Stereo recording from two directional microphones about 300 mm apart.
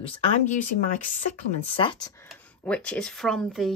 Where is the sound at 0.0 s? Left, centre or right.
Left.